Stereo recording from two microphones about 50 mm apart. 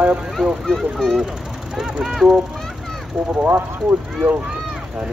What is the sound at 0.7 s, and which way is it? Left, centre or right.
Speech, centre.